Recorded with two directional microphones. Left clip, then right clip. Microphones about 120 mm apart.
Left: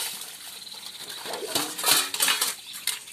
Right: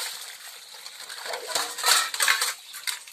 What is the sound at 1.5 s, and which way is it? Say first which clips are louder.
Music: right 1 dB; 5° left (ahead or behind).